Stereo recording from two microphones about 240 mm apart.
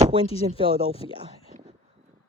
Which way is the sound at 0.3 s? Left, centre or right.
Left.